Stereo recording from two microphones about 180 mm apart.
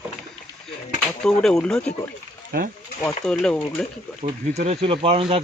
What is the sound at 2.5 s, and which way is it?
Speech, 55° right (ahead or behind).